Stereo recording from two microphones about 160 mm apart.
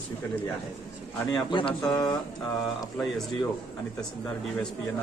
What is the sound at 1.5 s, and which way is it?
Speech, 30° left (ahead or behind).